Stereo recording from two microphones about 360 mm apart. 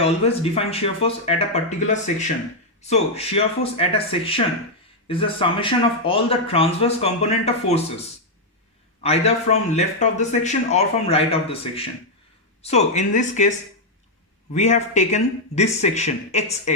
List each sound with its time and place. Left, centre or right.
0.0 s speech: centre
9.0 s speech: centre
14.5 s speech: centre